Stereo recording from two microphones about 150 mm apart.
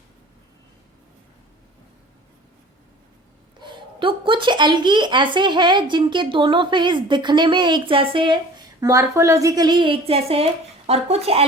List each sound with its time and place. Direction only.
3.6 s speech: 30° right (ahead or behind)